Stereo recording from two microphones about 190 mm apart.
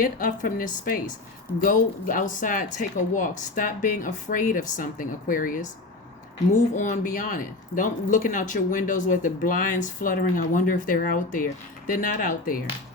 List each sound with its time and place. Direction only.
0.0 s speech: 50° left (ahead or behind)